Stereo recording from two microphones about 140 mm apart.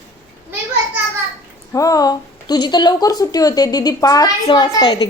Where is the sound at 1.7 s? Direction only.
25° left (ahead or behind).